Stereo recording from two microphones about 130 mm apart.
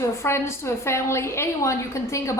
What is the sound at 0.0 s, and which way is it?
A woman's voice, 20° left (ahead or behind).